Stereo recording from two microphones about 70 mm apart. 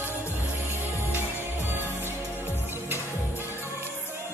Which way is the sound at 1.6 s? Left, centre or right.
Right.